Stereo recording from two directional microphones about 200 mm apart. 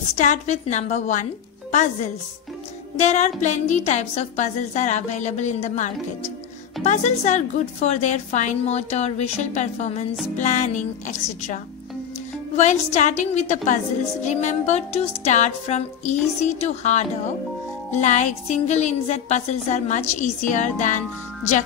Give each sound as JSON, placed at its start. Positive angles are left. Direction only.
{"t": 0.2, "sound": "a woman's voice", "side_deg": 35}
{"t": 3.0, "sound": "a woman's voice", "side_deg": 35}